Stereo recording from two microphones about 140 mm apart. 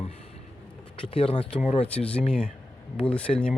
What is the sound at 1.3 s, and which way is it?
Speech, 10° left (ahead or behind).